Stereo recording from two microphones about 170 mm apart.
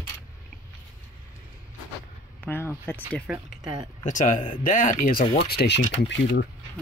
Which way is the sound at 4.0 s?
45° left (ahead or behind).